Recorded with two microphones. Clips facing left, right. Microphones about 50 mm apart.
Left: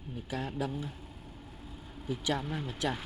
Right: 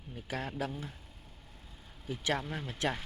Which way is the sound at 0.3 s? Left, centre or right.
Right.